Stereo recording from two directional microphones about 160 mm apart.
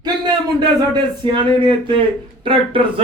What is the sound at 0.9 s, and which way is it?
Speech, 30° right (ahead or behind).